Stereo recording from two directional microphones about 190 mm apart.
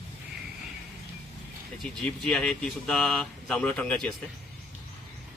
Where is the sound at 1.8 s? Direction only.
Centre (ahead or behind).